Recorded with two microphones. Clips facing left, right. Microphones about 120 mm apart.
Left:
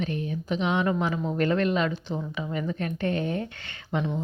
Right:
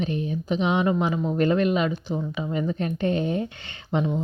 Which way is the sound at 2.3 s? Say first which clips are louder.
Right 4 dB; 20° right (ahead or behind).